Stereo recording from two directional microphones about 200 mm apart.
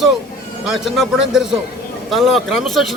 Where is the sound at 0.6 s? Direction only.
5° right (ahead or behind).